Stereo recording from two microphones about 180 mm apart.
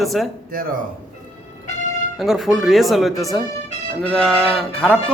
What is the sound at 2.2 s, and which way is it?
Speech, centre (ahead or behind).